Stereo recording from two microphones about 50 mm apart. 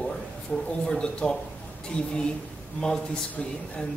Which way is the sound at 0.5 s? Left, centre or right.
Left.